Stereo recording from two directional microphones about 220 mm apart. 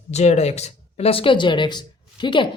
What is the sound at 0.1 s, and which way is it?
Speech, 30° left (ahead or behind).